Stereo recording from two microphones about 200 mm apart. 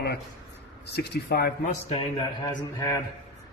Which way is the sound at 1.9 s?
20° left (ahead or behind).